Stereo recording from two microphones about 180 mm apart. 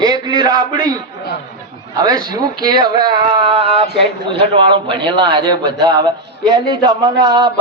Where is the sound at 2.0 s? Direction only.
20° right (ahead or behind).